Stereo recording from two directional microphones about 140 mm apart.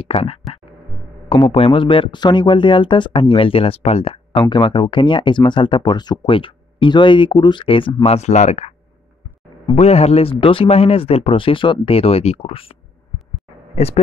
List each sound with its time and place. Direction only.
0.0 s speech: 45° left (ahead or behind)
9.8 s speech: 45° left (ahead or behind)
13.7 s speech: 45° left (ahead or behind)